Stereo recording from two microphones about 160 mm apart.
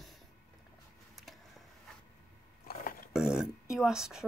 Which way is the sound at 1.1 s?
Centre (ahead or behind).